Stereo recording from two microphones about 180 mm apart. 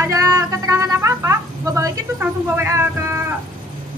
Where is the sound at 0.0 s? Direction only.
20° right (ahead or behind).